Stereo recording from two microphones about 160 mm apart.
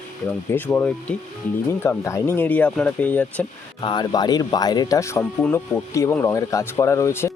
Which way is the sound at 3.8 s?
30° left (ahead or behind).